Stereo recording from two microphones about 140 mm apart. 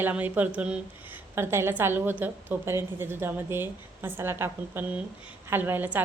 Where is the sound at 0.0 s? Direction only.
10° right (ahead or behind).